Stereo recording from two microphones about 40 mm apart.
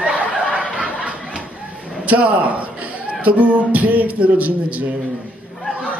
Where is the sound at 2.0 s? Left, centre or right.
Right.